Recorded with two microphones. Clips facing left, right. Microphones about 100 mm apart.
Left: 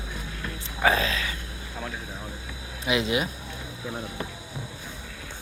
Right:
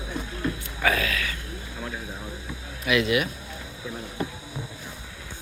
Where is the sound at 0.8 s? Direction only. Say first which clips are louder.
Left 2 dB; 25° left (ahead or behind).